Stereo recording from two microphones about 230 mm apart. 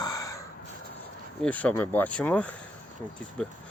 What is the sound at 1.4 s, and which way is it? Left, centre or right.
Speech, centre.